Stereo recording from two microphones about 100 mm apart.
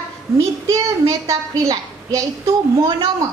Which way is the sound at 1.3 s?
35° right (ahead or behind).